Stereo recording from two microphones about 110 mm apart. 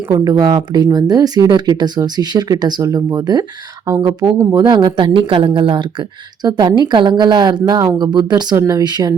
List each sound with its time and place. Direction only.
0.1 s speech: 35° right (ahead or behind)